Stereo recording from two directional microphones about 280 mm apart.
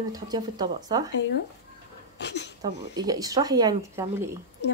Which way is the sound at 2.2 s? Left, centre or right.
Left.